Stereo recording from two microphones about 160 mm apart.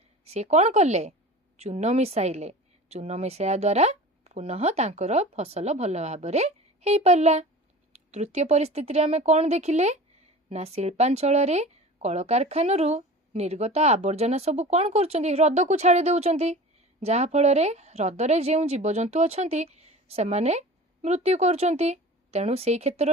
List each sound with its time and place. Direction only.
0.3 s a woman's voice: 40° right (ahead or behind)